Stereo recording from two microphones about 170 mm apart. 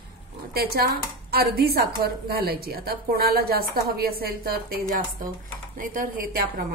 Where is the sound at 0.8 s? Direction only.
65° right (ahead or behind).